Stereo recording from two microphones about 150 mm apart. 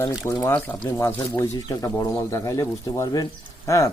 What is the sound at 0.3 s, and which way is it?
Speech, 20° left (ahead or behind).